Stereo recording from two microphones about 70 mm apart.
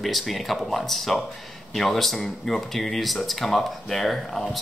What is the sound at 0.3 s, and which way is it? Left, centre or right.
Speech, centre.